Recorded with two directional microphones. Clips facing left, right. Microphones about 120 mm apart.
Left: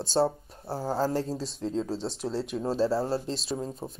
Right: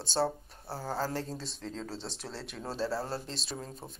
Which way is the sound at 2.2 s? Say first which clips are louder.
Left 11 dB; 15° left (ahead or behind).